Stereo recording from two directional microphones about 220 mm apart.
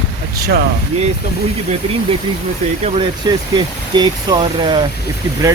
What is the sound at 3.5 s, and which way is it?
Speech, 20° right (ahead or behind).